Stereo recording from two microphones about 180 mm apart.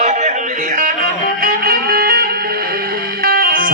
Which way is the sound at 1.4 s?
55° right (ahead or behind).